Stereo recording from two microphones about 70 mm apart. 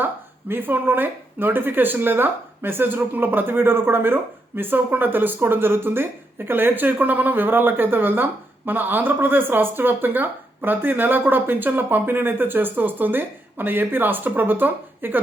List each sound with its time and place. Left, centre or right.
0.0 s speech: right